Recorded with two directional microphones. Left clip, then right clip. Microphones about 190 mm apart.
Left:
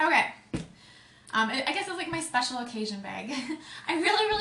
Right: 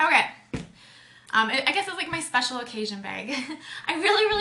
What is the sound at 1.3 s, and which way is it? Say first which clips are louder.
A woman's voice: right 5 dB; 15° right (ahead or behind).